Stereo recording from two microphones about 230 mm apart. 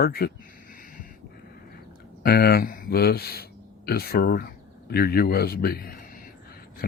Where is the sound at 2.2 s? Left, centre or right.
Left.